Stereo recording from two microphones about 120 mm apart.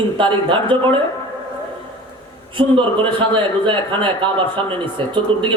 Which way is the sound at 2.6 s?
45° right (ahead or behind).